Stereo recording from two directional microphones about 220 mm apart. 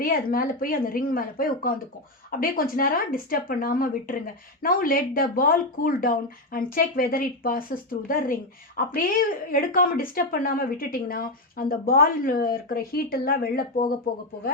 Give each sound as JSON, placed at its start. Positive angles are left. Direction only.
{"t": 0.0, "sound": "speech", "side_deg": 40}